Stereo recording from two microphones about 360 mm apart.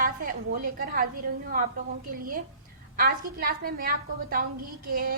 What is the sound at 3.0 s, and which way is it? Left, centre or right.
A woman's voice, right.